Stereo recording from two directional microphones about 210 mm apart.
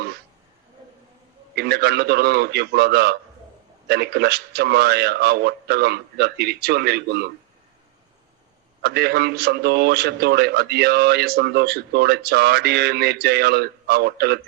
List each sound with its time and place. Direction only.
1.5 s a man's voice: 50° right (ahead or behind)
8.8 s a man's voice: 50° right (ahead or behind)